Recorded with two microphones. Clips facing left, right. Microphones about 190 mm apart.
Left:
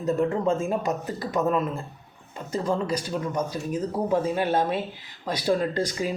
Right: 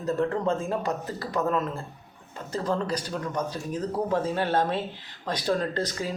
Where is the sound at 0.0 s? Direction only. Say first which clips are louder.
Left 2 dB; 15° left (ahead or behind).